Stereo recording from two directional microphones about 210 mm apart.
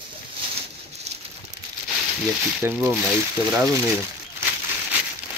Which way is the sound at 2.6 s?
10° right (ahead or behind).